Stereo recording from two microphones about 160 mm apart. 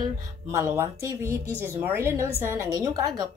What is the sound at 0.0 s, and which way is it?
A woman's voice, 20° right (ahead or behind).